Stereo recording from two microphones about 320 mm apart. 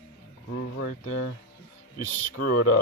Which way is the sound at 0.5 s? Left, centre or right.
Left.